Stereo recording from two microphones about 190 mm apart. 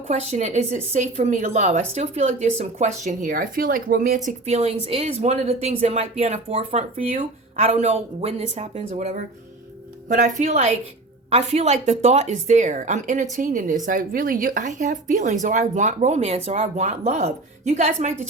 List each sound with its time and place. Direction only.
0.1 s a woman's voice: 35° right (ahead or behind)
4.3 s a woman's voice: 35° right (ahead or behind)